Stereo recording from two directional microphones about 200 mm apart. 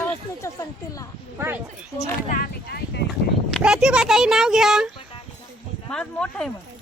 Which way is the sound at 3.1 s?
5° right (ahead or behind).